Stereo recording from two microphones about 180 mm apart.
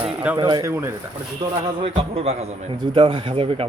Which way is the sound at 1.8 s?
35° right (ahead or behind).